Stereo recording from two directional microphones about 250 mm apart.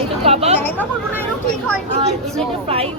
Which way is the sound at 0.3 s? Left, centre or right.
Right.